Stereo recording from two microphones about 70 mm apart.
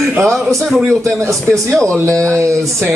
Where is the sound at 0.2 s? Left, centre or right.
Centre.